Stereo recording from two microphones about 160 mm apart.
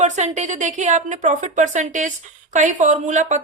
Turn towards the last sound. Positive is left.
turn(degrees=-50)  # may be behind; listen again after turning